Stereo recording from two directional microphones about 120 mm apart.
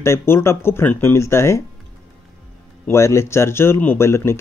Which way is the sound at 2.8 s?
25° left (ahead or behind).